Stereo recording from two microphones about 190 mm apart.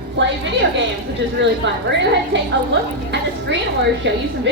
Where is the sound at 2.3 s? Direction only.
70° right (ahead or behind).